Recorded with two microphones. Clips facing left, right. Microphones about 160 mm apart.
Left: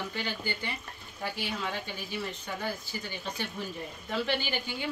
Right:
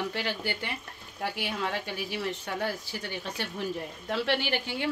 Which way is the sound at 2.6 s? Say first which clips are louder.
Right 2 dB; 75° right (ahead or behind).